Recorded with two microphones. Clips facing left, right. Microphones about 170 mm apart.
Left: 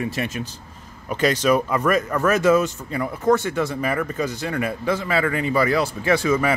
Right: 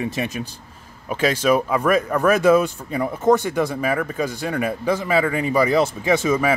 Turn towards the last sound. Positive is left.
turn(degrees=-20)  # may be behind; listen again after turning